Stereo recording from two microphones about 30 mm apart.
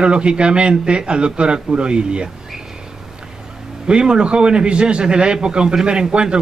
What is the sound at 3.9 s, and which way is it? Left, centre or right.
A man's voice, right.